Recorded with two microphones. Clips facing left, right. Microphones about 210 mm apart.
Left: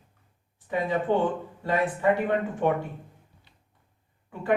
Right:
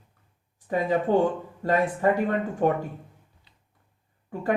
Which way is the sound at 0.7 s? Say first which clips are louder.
Right 3 dB; 40° right (ahead or behind).